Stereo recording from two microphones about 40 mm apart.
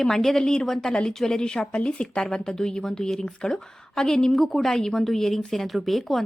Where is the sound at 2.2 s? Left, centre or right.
Centre.